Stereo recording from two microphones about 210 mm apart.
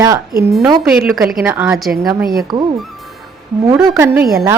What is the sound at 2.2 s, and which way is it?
Speech, 45° right (ahead or behind).